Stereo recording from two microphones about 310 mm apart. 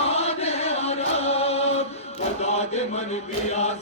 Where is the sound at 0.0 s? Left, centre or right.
Centre.